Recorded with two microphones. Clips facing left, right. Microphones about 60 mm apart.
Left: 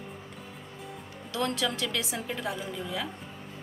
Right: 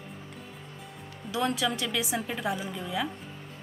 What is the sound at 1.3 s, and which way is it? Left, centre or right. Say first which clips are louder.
A woman's voice: right 2 dB; centre.